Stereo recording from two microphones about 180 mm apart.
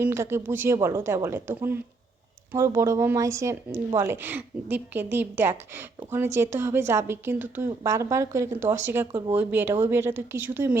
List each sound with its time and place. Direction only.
0.0 s speech: 15° right (ahead or behind)